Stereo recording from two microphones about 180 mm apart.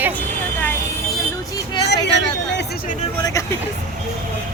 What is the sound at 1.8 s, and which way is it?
Hubbub, 70° left (ahead or behind).